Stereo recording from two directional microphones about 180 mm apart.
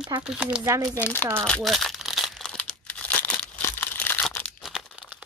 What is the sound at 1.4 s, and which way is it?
Crumpling, centre (ahead or behind).